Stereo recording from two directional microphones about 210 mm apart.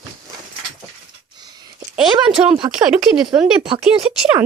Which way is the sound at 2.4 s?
10° right (ahead or behind).